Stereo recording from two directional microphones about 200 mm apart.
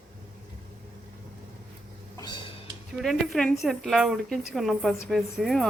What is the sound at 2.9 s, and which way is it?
A woman's voice, centre (ahead or behind).